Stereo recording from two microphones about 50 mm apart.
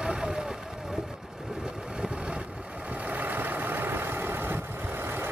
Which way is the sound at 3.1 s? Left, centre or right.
Right.